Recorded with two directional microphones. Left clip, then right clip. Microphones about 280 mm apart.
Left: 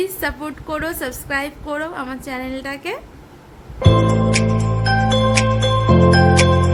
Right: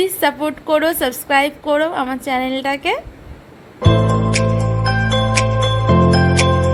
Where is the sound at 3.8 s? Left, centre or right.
Centre.